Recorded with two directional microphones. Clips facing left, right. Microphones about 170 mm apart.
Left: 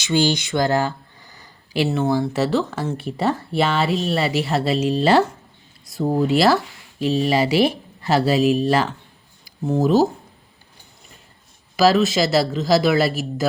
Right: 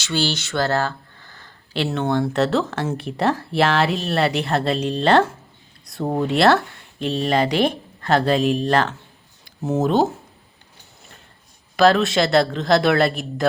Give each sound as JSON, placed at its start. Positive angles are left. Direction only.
{"t": 0.0, "sound": "speech", "side_deg": 15}
{"t": 11.8, "sound": "speech", "side_deg": 5}